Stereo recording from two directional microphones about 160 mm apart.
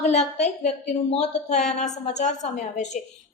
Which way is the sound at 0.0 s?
45° left (ahead or behind).